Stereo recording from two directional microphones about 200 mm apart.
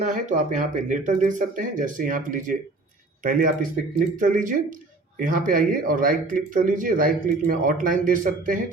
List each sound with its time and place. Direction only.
0.0 s speech: 40° right (ahead or behind)